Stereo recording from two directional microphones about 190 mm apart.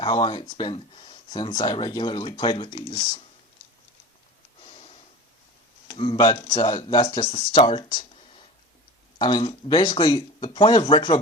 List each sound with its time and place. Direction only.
0.0 s speech: 25° left (ahead or behind)
5.9 s speech: 25° left (ahead or behind)